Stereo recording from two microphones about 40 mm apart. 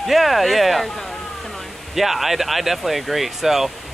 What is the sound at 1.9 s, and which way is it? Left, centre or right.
Speech, centre.